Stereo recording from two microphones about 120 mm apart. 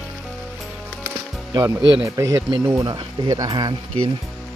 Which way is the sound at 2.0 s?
25° right (ahead or behind).